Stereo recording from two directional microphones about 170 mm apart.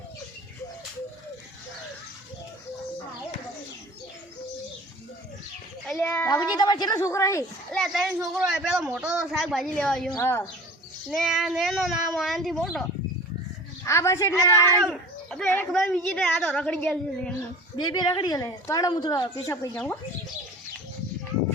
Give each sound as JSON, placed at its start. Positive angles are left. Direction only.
{"t": 5.8, "sound": "a sound", "side_deg": 10}
{"t": 7.7, "sound": "a woman's voice", "side_deg": 0}
{"t": 11.1, "sound": "speech", "side_deg": 0}
{"t": 13.8, "sound": "a woman's voice", "side_deg": 15}
{"t": 14.8, "sound": "a sound", "side_deg": 5}
{"t": 15.7, "sound": "a woman's voice", "side_deg": 5}
{"t": 17.7, "sound": "a woman's voice", "side_deg": 25}